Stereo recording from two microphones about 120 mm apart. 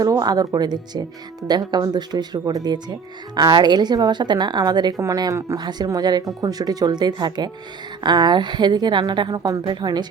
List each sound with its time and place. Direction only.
0.0 s a woman's voice: 35° right (ahead or behind)
5.5 s a woman's voice: 35° right (ahead or behind)